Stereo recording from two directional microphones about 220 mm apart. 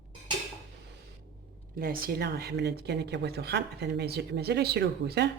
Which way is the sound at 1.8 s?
45° right (ahead or behind).